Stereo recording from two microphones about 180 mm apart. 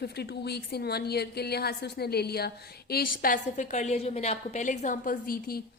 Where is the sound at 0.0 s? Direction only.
65° left (ahead or behind).